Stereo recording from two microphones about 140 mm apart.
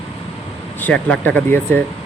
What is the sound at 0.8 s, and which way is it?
Speech, 10° left (ahead or behind).